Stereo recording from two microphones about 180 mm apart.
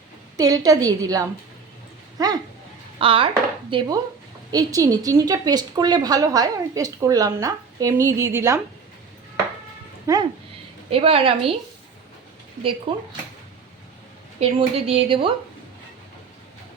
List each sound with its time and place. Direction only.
0.3 s a woman's voice: 20° right (ahead or behind)
10.1 s speech: 15° right (ahead or behind)
10.8 s speech: 30° right (ahead or behind)
12.9 s a woman's voice: 30° right (ahead or behind)
14.3 s speech: 35° right (ahead or behind)